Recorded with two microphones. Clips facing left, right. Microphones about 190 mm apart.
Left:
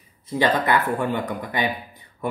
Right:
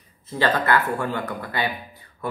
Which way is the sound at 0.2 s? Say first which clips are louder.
Left 2 dB; 15° left (ahead or behind).